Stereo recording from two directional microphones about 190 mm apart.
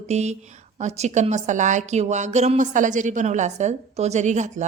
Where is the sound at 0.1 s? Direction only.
35° right (ahead or behind).